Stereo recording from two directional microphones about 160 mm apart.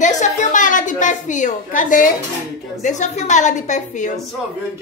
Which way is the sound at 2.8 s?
50° left (ahead or behind).